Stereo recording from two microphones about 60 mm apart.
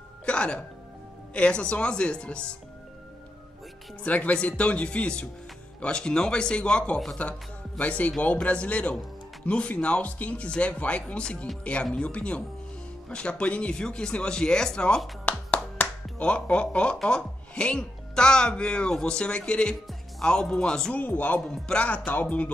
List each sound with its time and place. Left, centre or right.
0.2 s music: centre
1.3 s speech: centre
4.0 s speech: left
20.9 s speech: left